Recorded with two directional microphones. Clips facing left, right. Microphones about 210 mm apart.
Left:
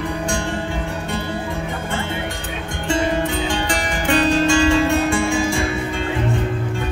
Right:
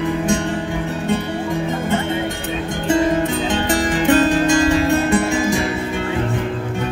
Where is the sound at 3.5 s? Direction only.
20° right (ahead or behind).